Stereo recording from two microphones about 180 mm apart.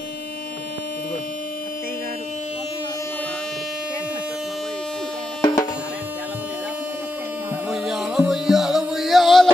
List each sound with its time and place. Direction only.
5.4 s music: 20° left (ahead or behind)
7.7 s music: centre (ahead or behind)